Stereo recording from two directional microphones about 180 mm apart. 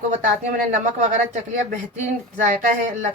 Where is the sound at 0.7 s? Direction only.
40° right (ahead or behind).